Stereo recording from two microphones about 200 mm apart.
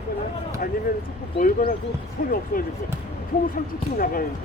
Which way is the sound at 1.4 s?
45° left (ahead or behind).